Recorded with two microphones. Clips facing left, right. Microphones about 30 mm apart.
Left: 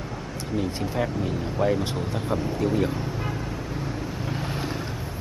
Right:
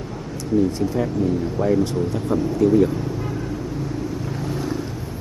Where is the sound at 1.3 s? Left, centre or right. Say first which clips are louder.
Right 3 dB; centre.